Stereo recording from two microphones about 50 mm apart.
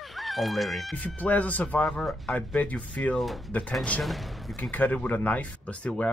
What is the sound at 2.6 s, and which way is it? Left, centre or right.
Speech, left.